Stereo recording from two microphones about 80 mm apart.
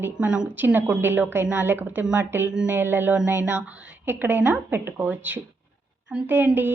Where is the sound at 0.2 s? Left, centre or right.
Centre.